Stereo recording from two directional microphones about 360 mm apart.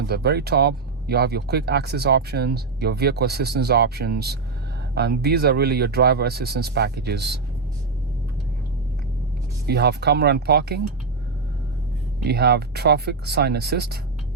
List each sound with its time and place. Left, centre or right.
0.1 s speech: right
9.6 s speech: right
12.2 s speech: right